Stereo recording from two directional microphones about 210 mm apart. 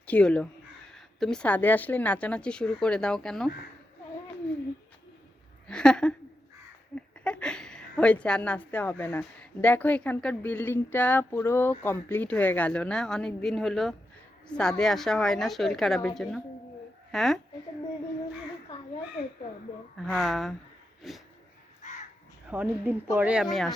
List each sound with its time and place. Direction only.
0.0 s speech: 5° left (ahead or behind)
5.6 s a woman's voice: 5° left (ahead or behind)
20.0 s speech: centre (ahead or behind)
21.8 s crow: 35° left (ahead or behind)
22.4 s speech: 10° right (ahead or behind)